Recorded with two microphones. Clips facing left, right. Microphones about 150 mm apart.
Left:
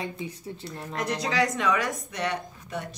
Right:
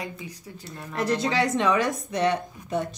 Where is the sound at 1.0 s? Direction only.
25° right (ahead or behind).